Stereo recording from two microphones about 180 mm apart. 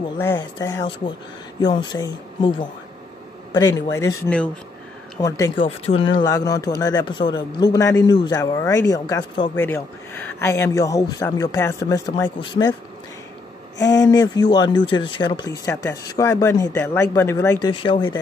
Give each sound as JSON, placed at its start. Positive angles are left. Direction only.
{"t": 0.4, "sound": "speech", "side_deg": 20}
{"t": 14.0, "sound": "speech", "side_deg": 20}
{"t": 17.6, "sound": "speech", "side_deg": 25}